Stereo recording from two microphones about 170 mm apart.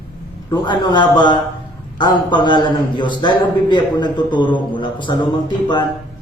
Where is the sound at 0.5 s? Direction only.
25° left (ahead or behind).